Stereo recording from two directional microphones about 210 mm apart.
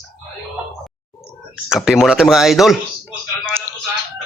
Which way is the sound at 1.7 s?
5° right (ahead or behind).